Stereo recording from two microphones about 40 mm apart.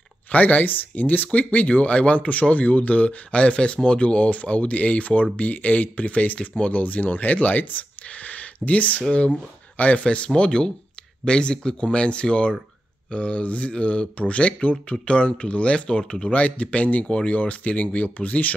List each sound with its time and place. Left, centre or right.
0.3 s speech: left
10.0 s speech: left